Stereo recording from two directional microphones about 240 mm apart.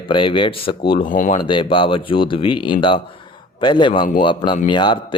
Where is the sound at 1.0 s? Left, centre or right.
Left.